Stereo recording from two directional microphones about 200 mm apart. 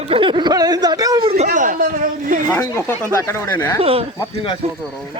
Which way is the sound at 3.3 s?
15° left (ahead or behind).